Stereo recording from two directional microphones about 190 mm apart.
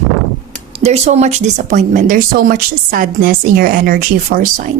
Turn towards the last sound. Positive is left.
turn(degrees=-45)  # may be behind; listen again after turning